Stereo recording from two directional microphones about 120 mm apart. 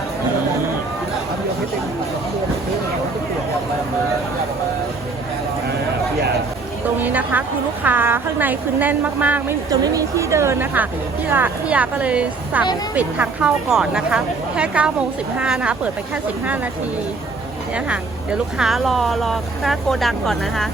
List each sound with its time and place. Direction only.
7.0 s a woman's voice: 15° right (ahead or behind)
9.6 s speech: 30° right (ahead or behind); by 15.9 s 5° right (ahead or behind)
17.7 s speech: 10° right (ahead or behind)